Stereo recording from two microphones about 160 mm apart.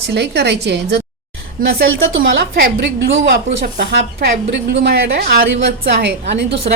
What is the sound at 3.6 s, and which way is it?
A woman's voice, 90° right.